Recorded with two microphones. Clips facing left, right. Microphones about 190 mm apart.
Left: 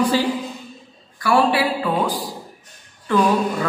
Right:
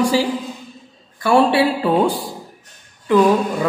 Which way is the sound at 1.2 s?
25° right (ahead or behind).